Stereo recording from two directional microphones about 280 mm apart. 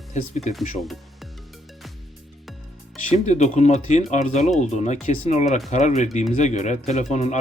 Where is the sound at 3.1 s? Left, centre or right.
Left.